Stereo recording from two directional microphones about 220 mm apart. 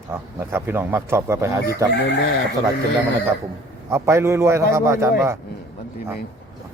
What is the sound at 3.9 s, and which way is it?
Speech, 10° right (ahead or behind).